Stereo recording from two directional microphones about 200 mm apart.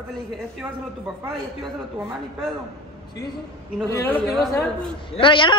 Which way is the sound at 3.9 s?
10° left (ahead or behind).